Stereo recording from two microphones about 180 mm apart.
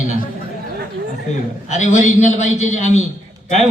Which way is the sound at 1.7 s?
40° left (ahead or behind).